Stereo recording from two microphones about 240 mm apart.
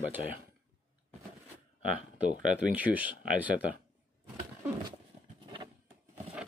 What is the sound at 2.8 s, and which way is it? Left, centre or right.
Speech, centre.